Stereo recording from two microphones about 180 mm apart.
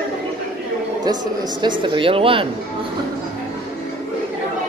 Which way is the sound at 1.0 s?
25° right (ahead or behind).